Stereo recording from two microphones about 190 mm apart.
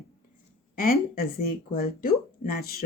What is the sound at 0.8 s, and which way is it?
Speech, 50° left (ahead or behind).